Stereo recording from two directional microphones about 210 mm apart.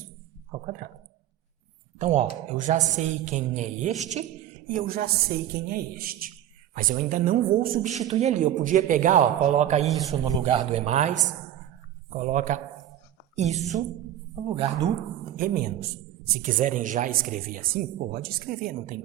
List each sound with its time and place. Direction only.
0.6 s speech: 40° right (ahead or behind)
2.0 s a man's voice: 35° right (ahead or behind)
10.1 s a woman's voice: 20° right (ahead or behind)
15.4 s a man's voice: 45° right (ahead or behind)